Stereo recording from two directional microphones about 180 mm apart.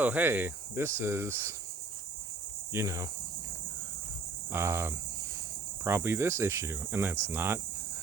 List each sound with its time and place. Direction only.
0.0 s speech: 10° right (ahead or behind)
2.7 s speech: 15° right (ahead or behind)
4.5 s speech: 15° right (ahead or behind)